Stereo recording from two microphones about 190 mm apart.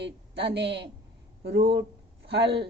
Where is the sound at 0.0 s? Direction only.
65° right (ahead or behind).